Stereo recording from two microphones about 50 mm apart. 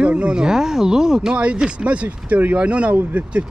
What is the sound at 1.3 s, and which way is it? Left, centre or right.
Speech, right.